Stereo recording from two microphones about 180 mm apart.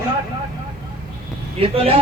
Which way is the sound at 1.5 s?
30° right (ahead or behind).